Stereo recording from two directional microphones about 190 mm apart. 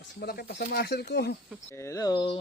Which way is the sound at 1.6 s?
15° left (ahead or behind).